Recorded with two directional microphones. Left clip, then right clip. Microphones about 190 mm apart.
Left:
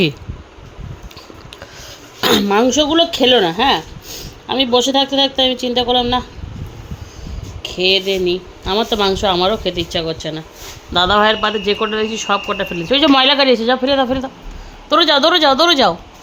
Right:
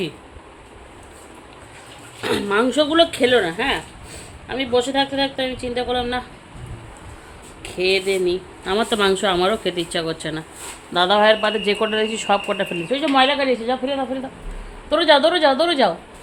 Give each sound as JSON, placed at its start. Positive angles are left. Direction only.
{"t": 2.5, "sound": "a woman's voice", "side_deg": 20}
{"t": 3.2, "sound": "speech", "side_deg": 35}
{"t": 7.6, "sound": "speech", "side_deg": 15}
{"t": 10.9, "sound": "speech", "side_deg": 20}
{"t": 12.9, "sound": "a man's voice", "side_deg": 40}
{"t": 14.8, "sound": "a woman's voice", "side_deg": 25}